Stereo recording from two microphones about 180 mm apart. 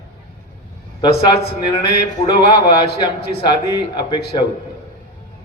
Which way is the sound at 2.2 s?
25° left (ahead or behind).